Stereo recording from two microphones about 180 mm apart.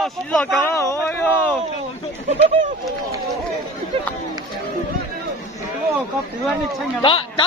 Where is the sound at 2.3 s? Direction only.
45° right (ahead or behind).